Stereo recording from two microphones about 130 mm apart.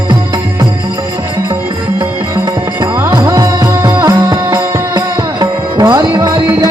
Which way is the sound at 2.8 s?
25° right (ahead or behind).